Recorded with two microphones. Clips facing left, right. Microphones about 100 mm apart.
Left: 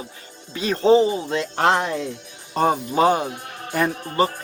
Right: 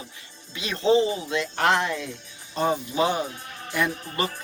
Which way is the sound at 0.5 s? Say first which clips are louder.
Left 5 dB; 40° left (ahead or behind).